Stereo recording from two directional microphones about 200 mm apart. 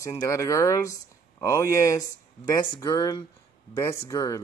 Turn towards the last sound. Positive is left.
turn(degrees=15)  # may be behind; listen again after turning